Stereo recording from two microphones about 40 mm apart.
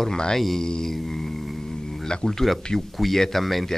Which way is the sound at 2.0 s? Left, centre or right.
Centre.